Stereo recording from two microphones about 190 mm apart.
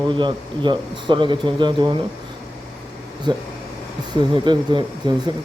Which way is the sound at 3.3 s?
25° right (ahead or behind).